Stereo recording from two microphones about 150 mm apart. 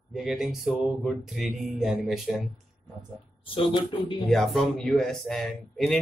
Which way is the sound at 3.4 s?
35° left (ahead or behind).